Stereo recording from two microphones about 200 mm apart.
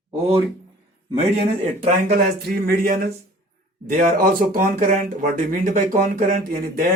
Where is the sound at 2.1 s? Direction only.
50° right (ahead or behind).